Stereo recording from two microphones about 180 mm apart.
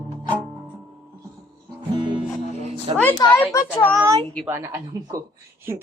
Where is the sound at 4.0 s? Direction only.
15° right (ahead or behind).